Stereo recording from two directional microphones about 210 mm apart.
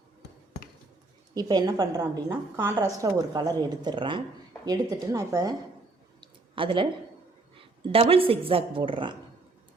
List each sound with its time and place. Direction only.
1.3 s a woman's voice: 20° right (ahead or behind)
6.1 s a sound: 25° right (ahead or behind)
7.5 s speech: 25° right (ahead or behind)